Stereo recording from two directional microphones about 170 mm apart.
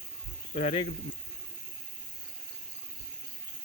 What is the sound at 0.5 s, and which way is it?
Speech, 35° left (ahead or behind).